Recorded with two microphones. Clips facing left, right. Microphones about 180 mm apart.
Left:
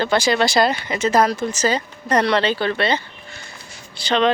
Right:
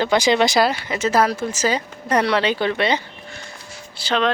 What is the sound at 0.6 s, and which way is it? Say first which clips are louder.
Speech: left 1 dB; 5° right (ahead or behind).